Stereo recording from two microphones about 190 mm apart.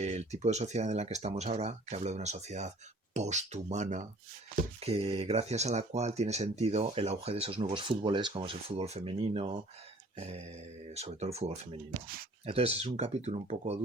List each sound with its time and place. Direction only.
0.0 s speech: 35° right (ahead or behind)
11.9 s speech: 50° right (ahead or behind)
12.5 s speech: 30° right (ahead or behind)